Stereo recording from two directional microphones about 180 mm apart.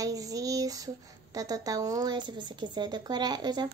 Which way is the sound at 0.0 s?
20° right (ahead or behind).